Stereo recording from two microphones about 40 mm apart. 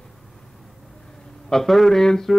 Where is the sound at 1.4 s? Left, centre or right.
Centre.